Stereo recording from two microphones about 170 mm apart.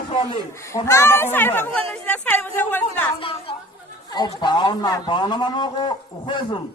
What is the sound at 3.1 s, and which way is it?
A woman's voice, 30° left (ahead or behind).